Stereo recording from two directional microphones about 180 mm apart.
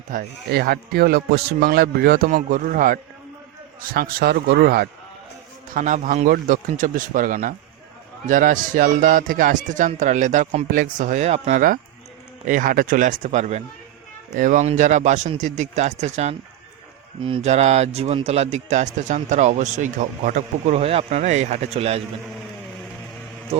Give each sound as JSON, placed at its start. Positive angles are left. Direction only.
{"t": 0.1, "sound": "a man's voice", "side_deg": -55}